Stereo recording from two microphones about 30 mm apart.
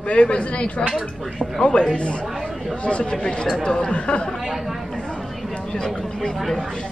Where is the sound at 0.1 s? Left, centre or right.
Left.